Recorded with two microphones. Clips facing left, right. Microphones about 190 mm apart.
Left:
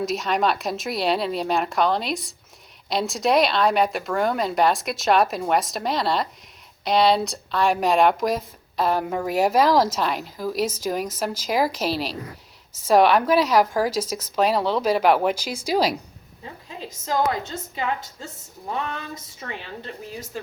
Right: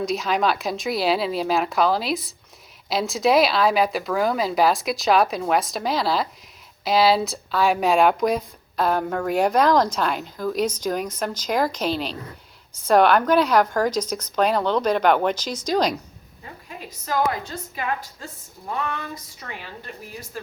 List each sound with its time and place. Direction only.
0.0 s speech: centre (ahead or behind)
17.4 s a woman's voice: 25° left (ahead or behind)